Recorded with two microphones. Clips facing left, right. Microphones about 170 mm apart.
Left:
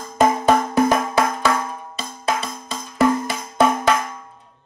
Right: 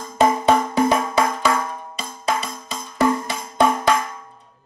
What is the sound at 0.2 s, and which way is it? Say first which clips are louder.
Music: even; centre (ahead or behind).